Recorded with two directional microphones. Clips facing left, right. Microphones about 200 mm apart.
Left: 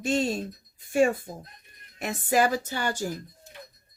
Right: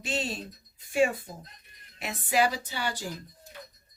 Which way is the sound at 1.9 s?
45° left (ahead or behind).